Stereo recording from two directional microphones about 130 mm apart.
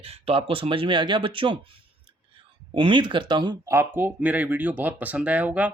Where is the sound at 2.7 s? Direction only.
40° right (ahead or behind).